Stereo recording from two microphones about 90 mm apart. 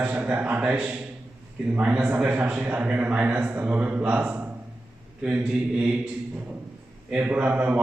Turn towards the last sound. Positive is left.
turn(degrees=-15)  # may be behind; listen again after turning